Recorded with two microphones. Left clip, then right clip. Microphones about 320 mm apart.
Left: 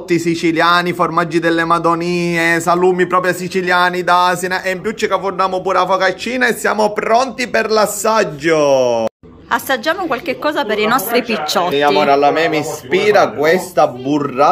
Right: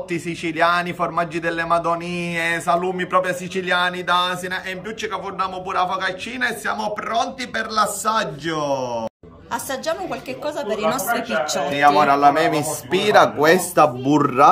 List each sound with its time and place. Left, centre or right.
0.1 s a man's voice: centre
12.1 s a man's voice: centre